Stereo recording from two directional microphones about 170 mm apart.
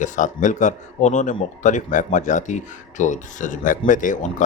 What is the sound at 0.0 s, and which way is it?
Speech, 45° left (ahead or behind).